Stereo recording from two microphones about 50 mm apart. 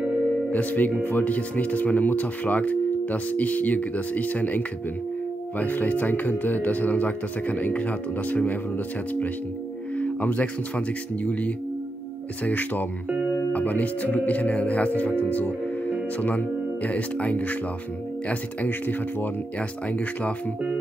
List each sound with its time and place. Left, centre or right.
0.5 s speech: left
9.9 s music: left
11.2 s speech: left